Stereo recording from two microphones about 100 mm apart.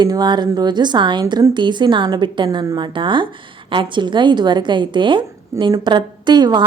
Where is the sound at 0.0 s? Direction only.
45° right (ahead or behind).